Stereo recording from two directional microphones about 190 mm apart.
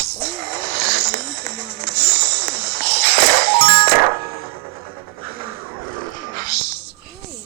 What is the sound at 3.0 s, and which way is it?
Music, 30° right (ahead or behind).